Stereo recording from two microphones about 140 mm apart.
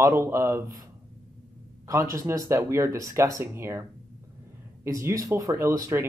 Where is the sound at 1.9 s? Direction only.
20° right (ahead or behind).